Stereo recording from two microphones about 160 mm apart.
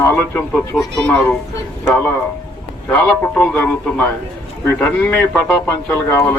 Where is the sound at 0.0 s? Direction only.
15° left (ahead or behind).